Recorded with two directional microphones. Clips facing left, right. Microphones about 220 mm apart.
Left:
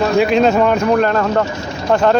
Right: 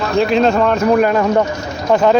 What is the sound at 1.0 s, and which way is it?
Speech, 10° right (ahead or behind).